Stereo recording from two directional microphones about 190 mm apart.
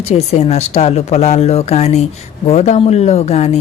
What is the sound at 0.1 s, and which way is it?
A woman's voice, 35° left (ahead or behind).